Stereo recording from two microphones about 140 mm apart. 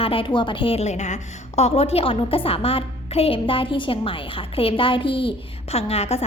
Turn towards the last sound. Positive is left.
turn(degrees=50)  # may be behind; listen again after turning